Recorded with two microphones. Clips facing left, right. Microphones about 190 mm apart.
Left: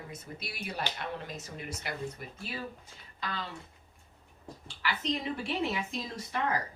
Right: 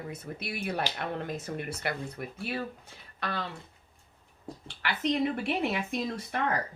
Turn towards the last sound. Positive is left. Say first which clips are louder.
# right 5 dB
turn(degrees=-60)  # may be behind; listen again after turning